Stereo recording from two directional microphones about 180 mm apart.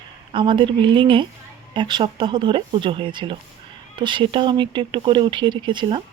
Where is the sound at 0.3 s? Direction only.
25° right (ahead or behind).